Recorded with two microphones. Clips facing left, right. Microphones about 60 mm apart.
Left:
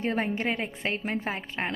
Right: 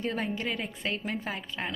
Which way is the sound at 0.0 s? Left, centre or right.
Left.